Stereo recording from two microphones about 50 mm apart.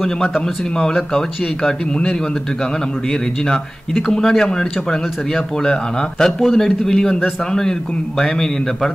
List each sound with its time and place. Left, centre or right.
0.0 s a man's voice: centre
3.4 s a man's voice: centre